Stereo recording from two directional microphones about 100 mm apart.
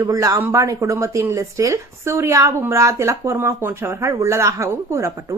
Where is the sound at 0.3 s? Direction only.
20° right (ahead or behind).